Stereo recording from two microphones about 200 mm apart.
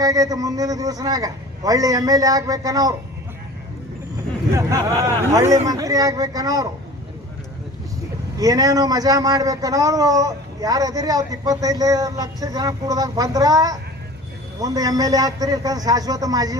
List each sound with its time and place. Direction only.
0.0 s a man's voice: 20° right (ahead or behind)
5.3 s a man's voice: 15° right (ahead or behind)
8.4 s a man's voice: 20° right (ahead or behind)